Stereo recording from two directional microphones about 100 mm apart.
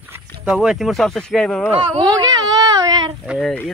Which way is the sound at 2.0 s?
40° right (ahead or behind).